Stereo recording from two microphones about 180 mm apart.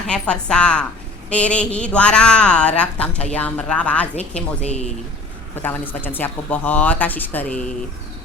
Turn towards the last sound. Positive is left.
turn(degrees=10)  # may be behind; listen again after turning